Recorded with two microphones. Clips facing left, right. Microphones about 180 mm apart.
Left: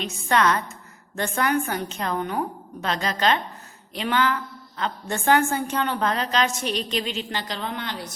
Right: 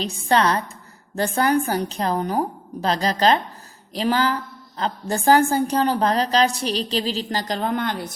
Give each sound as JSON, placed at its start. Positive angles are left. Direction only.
{"t": 0.0, "sound": "a woman's voice", "side_deg": -35}